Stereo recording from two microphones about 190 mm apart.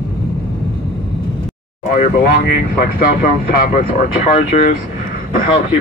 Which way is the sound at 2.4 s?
50° left (ahead or behind).